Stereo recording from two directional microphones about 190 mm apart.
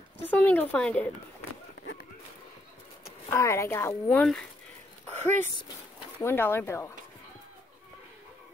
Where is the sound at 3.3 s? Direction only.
15° left (ahead or behind).